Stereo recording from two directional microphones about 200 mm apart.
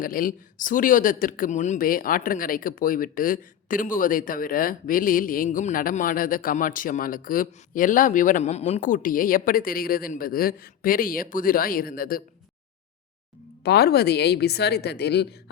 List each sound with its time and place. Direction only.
0.0 s speech: 45° left (ahead or behind)
13.6 s a woman's voice: 55° left (ahead or behind)